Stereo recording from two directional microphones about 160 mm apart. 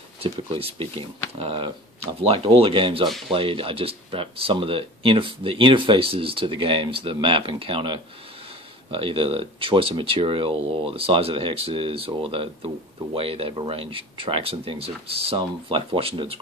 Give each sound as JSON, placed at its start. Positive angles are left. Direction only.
{"t": 0.2, "sound": "speech", "side_deg": -35}